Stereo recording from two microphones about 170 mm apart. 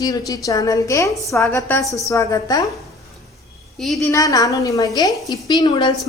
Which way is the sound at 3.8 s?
Centre (ahead or behind).